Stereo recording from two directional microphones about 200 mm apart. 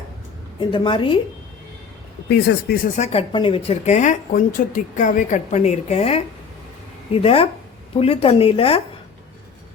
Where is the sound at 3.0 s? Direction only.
30° left (ahead or behind).